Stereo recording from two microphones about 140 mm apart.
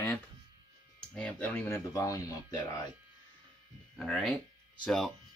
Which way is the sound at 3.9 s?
Centre (ahead or behind).